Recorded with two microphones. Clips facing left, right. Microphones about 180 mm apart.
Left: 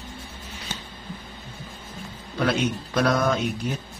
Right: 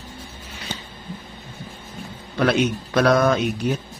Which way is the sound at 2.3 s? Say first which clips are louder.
Right 4 dB; 75° right (ahead or behind).